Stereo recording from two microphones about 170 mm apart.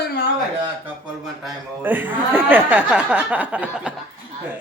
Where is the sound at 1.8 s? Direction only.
10° right (ahead or behind).